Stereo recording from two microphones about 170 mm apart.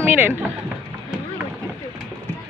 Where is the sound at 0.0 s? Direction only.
10° right (ahead or behind).